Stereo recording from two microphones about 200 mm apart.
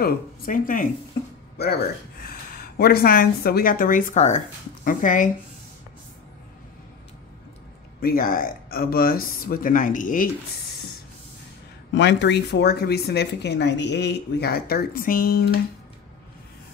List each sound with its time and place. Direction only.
0.0 s speech: 40° left (ahead or behind)
8.0 s speech: 45° left (ahead or behind)
11.9 s speech: 60° left (ahead or behind)